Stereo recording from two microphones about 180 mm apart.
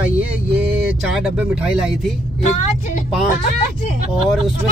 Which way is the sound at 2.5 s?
40° left (ahead or behind).